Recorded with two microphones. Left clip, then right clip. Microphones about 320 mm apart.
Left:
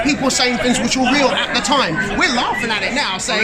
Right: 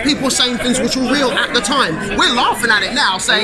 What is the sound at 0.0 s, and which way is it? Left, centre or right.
Speech, centre.